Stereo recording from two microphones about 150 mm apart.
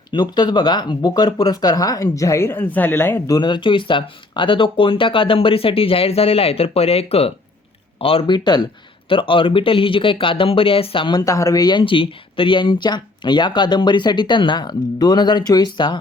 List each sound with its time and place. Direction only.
0.1 s speech: 30° left (ahead or behind)